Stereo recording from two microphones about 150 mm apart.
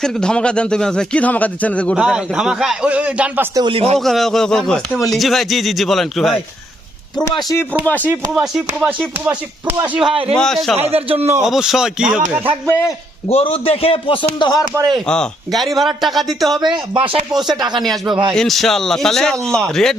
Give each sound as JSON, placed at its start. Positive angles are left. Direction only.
{"t": 0.0, "sound": "a man's voice", "side_deg": 5}
{"t": 2.0, "sound": "speech", "side_deg": -5}
{"t": 3.5, "sound": "speech", "side_deg": -30}
{"t": 3.9, "sound": "speech", "side_deg": 0}
{"t": 8.0, "sound": "speech", "side_deg": -5}
{"t": 10.9, "sound": "speech", "side_deg": -40}
{"t": 11.4, "sound": "speech", "side_deg": 0}
{"t": 13.2, "sound": "a man's voice", "side_deg": 40}
{"t": 14.8, "sound": "speech", "side_deg": -30}
{"t": 15.0, "sound": "speech", "side_deg": 5}
{"t": 16.6, "sound": "speech", "side_deg": -30}
{"t": 17.8, "sound": "speech", "side_deg": 0}
{"t": 18.1, "sound": "speech", "side_deg": -30}
{"t": 18.3, "sound": "speech", "side_deg": 0}